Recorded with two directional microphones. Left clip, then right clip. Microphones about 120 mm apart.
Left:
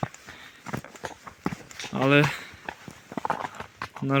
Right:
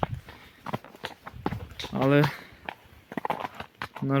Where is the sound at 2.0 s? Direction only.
30° right (ahead or behind).